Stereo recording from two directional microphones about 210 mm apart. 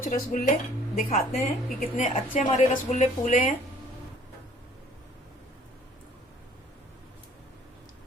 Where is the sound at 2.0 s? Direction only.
35° left (ahead or behind).